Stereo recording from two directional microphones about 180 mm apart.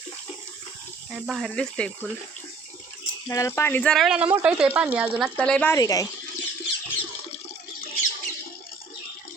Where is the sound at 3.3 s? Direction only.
15° left (ahead or behind); by 5.1 s 5° right (ahead or behind).